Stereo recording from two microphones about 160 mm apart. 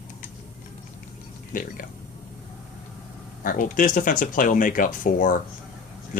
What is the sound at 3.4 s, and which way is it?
Speech, 60° left (ahead or behind).